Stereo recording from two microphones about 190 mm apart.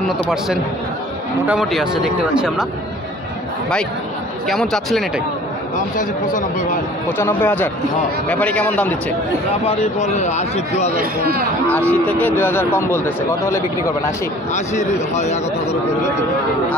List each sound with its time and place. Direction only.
1.5 s speech: centre (ahead or behind)
4.5 s speech: centre (ahead or behind)
7.1 s speech: 10° left (ahead or behind)
9.7 s a man's voice: 35° left (ahead or behind)
11.6 s speech: 10° left (ahead or behind)
14.5 s a man's voice: 40° left (ahead or behind)